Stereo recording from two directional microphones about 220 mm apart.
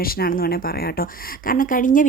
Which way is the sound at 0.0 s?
40° left (ahead or behind).